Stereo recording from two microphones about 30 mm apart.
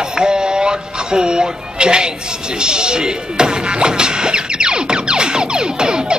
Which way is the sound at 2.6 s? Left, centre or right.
Right.